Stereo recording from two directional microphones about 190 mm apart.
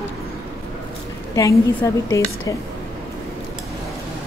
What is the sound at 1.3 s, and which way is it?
Speech, 15° left (ahead or behind).